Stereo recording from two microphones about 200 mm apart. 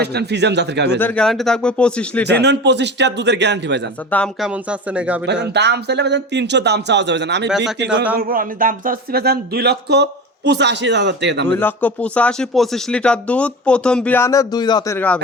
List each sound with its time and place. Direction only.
0.0 s speech: 55° right (ahead or behind)
0.9 s speech: 10° left (ahead or behind)
2.2 s speech: 60° right (ahead or behind)
4.1 s speech: 5° left (ahead or behind)
5.2 s speech: 55° right (ahead or behind)
8.1 s speech: 45° right (ahead or behind)
11.4 s speech: 10° left (ahead or behind)